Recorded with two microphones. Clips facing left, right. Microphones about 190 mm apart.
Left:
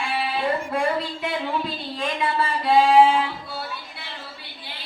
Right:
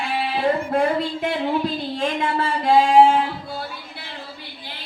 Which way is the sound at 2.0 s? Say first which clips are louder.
Right 1 dB; 45° right (ahead or behind).